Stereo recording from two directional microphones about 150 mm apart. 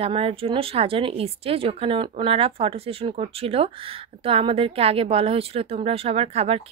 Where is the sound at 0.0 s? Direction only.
40° right (ahead or behind).